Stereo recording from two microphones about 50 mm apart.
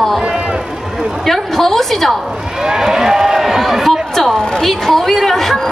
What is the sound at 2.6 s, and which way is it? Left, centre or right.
A woman's voice, centre.